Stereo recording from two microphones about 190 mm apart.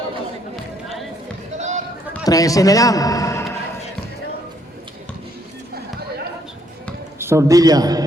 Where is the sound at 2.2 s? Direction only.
20° left (ahead or behind).